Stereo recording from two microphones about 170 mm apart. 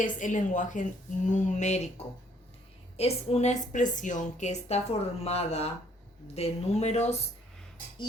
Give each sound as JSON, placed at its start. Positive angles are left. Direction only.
{"t": 0.0, "sound": "a woman's voice", "side_deg": 50}
{"t": 3.0, "sound": "a woman's voice", "side_deg": 40}